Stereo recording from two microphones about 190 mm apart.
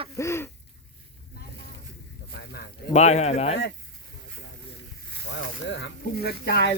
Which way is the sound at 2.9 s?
35° left (ahead or behind).